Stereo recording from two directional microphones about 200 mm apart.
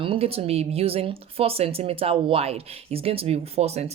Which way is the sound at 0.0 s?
30° right (ahead or behind).